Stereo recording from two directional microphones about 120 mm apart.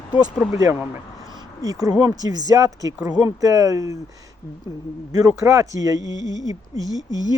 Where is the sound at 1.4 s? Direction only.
30° right (ahead or behind).